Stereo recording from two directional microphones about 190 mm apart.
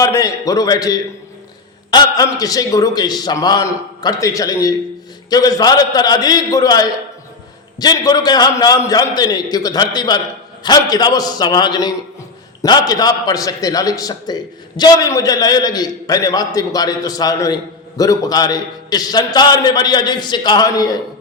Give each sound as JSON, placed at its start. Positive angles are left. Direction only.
{"t": 0.0, "sound": "a man's voice", "side_deg": 15}